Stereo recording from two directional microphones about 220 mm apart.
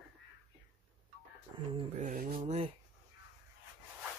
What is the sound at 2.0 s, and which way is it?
Mantra, 35° right (ahead or behind).